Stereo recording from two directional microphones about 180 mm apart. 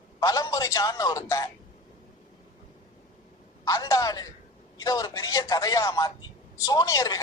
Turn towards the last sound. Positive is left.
turn(degrees=20)  # may be behind; listen again after turning